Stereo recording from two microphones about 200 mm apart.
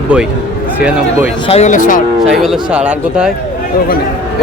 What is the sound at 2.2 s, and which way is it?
Speech, centre (ahead or behind).